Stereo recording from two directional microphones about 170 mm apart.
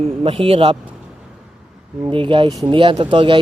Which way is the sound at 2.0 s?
30° right (ahead or behind).